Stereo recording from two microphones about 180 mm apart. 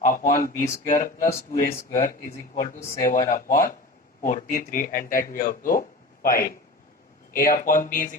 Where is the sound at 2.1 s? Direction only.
15° left (ahead or behind).